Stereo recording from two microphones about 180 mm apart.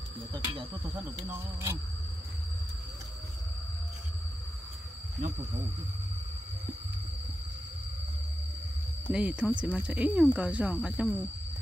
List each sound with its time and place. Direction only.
0.3 s a sound: 25° right (ahead or behind)
1.2 s speech: 15° right (ahead or behind)
9.1 s speech: 5° right (ahead or behind)